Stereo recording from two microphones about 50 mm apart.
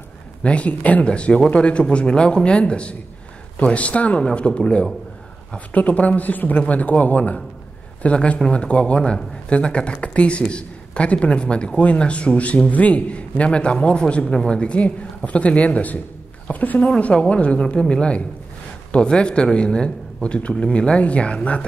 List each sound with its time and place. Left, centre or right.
0.4 s speech: left
5.7 s speech: left
16.9 s speech: left